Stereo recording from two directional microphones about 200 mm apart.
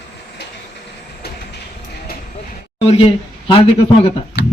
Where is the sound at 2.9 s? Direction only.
30° left (ahead or behind).